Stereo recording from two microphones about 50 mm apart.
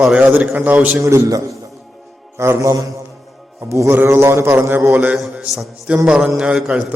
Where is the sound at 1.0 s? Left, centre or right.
Right.